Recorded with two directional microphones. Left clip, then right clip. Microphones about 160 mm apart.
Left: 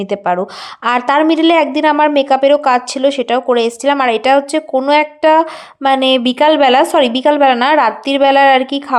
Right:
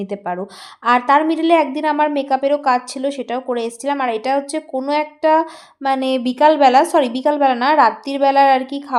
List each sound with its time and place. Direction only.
0.0 s a woman's voice: 25° left (ahead or behind)